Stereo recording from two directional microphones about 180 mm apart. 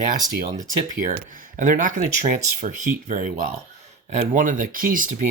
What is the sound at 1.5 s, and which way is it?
Speech, 45° right (ahead or behind).